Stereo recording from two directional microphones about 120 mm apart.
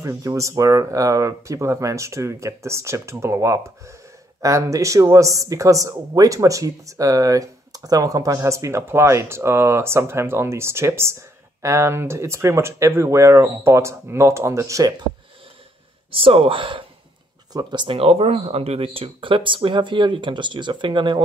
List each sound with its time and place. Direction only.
0.0 s speech: 25° right (ahead or behind)
16.1 s speech: 50° right (ahead or behind)
17.5 s speech: 35° right (ahead or behind)